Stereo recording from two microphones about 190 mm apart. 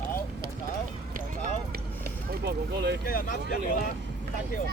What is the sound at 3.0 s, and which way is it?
Speech, 50° left (ahead or behind).